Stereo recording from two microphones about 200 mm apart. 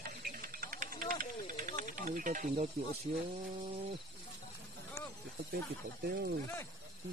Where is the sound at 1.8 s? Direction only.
40° right (ahead or behind).